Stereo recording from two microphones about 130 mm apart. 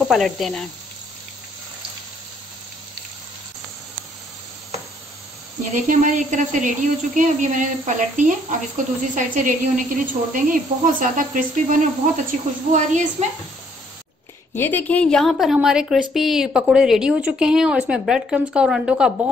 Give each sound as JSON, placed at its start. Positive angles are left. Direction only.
{"t": 0.1, "sound": "a woman's voice", "side_deg": 0}
{"t": 5.6, "sound": "speech", "side_deg": -85}
{"t": 9.1, "sound": "a woman's voice", "side_deg": -90}
{"t": 14.5, "sound": "a woman's voice", "side_deg": 15}